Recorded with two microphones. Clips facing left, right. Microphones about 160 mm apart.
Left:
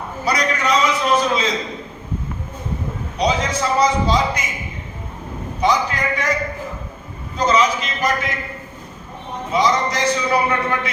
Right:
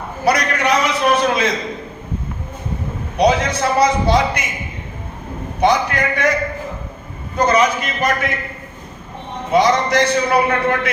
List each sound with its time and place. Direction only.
0.3 s a man's voice: 65° right (ahead or behind)
3.2 s a man's voice: 65° right (ahead or behind)
5.5 s a man's voice: 65° right (ahead or behind)
7.3 s a man's voice: 60° right (ahead or behind)
9.5 s a man's voice: 65° right (ahead or behind)